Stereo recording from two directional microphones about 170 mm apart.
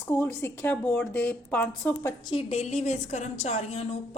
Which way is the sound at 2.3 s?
35° left (ahead or behind).